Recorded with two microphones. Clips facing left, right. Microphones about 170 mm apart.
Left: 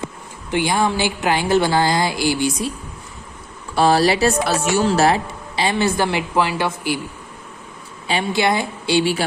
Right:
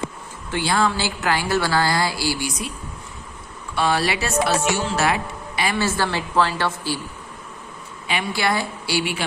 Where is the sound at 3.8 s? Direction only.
35° left (ahead or behind); by 7.0 s 15° left (ahead or behind).